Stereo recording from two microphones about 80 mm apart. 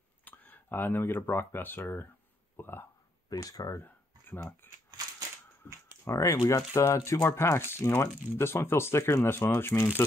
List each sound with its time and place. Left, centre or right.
0.2 s speech: left
3.3 s speech: left
3.8 s a sound: left
5.6 s speech: left
6.0 s speech: left